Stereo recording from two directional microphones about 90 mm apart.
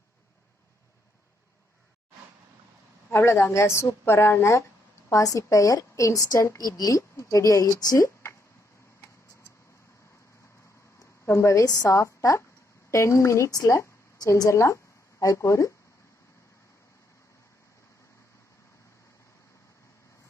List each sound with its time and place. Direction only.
3.1 s a woman's voice: 30° left (ahead or behind)
11.0 s a woman's voice: 30° left (ahead or behind)